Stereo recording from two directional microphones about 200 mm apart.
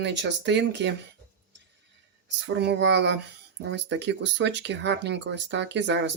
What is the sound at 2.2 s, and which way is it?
Speech, 60° right (ahead or behind).